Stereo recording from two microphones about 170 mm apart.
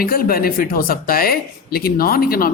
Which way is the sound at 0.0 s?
60° left (ahead or behind).